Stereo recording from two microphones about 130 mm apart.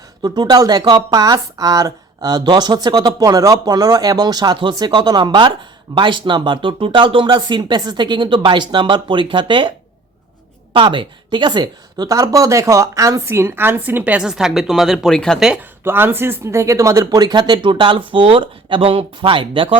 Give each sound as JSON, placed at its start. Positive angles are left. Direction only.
{"t": 0.2, "sound": "speech", "side_deg": -35}
{"t": 10.8, "sound": "speech", "side_deg": -35}
{"t": 15.8, "sound": "speech", "side_deg": -15}